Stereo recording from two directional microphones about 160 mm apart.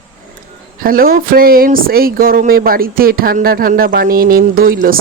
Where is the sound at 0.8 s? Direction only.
65° right (ahead or behind).